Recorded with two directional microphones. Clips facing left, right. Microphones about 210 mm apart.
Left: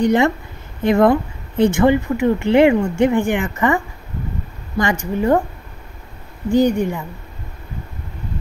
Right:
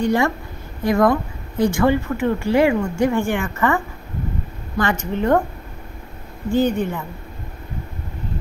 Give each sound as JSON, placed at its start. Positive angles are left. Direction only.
{"t": 0.0, "sound": "speech", "side_deg": 20}
{"t": 6.5, "sound": "speech", "side_deg": 15}